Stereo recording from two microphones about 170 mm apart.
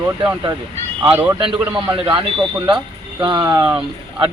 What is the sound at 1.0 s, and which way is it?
Speech, 10° right (ahead or behind).